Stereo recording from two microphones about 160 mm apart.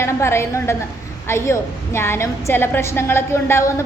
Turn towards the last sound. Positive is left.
turn(degrees=15)  # may be behind; listen again after turning